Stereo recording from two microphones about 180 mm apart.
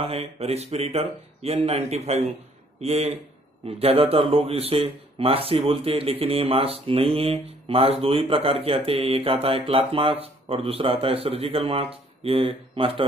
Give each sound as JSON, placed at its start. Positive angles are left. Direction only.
{"t": 0.0, "sound": "speech", "side_deg": -35}